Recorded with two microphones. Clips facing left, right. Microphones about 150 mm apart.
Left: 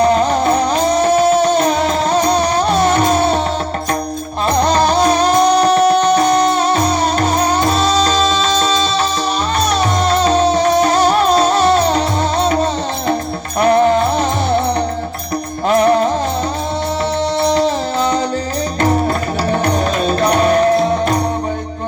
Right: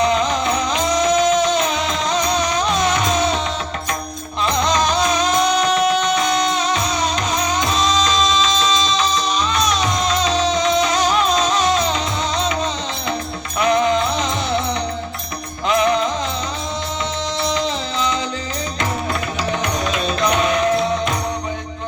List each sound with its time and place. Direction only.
0.0 s music: 45° left (ahead or behind)
4.4 s music: 50° left (ahead or behind)
15.7 s music: 45° left (ahead or behind)
17.4 s music: 50° left (ahead or behind)
19.5 s music: 45° left (ahead or behind)